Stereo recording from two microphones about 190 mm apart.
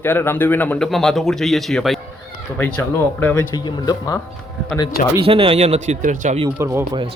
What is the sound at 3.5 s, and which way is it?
Speech, 20° left (ahead or behind).